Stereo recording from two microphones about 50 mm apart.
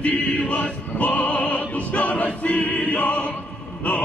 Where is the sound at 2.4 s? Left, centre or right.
Left.